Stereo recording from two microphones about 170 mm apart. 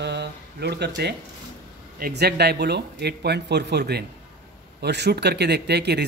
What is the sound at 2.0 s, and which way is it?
Speech, 65° right (ahead or behind).